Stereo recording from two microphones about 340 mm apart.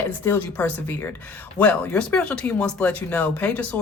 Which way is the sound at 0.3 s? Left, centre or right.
Centre.